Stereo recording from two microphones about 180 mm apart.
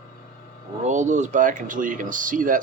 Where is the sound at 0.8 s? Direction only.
40° right (ahead or behind).